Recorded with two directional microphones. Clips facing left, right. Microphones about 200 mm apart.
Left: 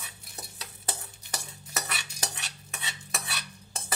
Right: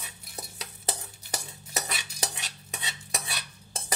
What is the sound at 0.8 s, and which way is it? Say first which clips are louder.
Stir: right 3 dB; 25° right (ahead or behind).